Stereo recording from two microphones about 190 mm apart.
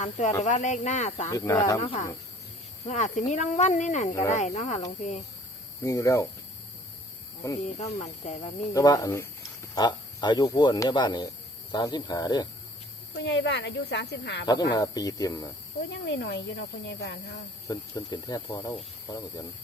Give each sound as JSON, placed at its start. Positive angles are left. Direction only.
{"t": 0.0, "sound": "speech", "side_deg": 40}
{"t": 1.3, "sound": "speech", "side_deg": 20}
{"t": 1.8, "sound": "speech", "side_deg": 35}
{"t": 5.8, "sound": "speech", "side_deg": 15}
{"t": 7.6, "sound": "speech", "side_deg": 35}
{"t": 8.7, "sound": "speech", "side_deg": 20}
{"t": 13.1, "sound": "speech", "side_deg": 70}
{"t": 14.4, "sound": "speech", "side_deg": 20}
{"t": 15.9, "sound": "speech", "side_deg": 65}
{"t": 17.7, "sound": "speech", "side_deg": 20}